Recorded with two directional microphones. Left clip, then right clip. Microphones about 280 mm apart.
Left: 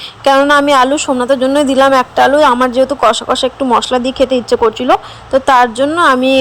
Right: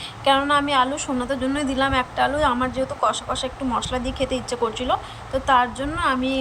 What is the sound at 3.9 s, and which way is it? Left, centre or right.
A woman's voice, left.